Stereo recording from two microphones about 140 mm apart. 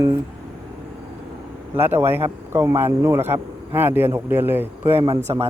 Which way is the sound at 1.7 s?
15° right (ahead or behind).